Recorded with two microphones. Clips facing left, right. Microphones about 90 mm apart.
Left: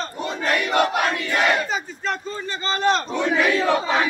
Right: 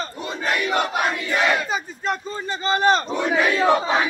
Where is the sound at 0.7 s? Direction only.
5° right (ahead or behind).